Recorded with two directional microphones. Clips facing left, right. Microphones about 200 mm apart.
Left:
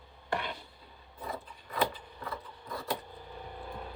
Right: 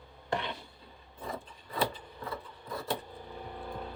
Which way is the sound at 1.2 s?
30° right (ahead or behind).